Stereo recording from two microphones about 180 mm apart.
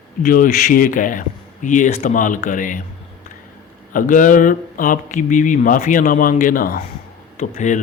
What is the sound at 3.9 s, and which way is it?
Speech, 45° left (ahead or behind).